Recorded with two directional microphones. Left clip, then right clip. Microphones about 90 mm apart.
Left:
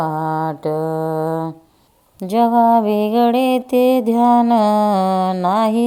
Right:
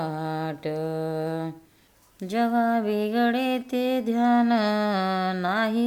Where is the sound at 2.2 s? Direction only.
45° left (ahead or behind).